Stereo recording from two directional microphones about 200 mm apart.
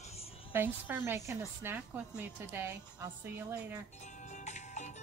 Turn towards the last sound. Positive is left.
turn(degrees=35)  # may be behind; listen again after turning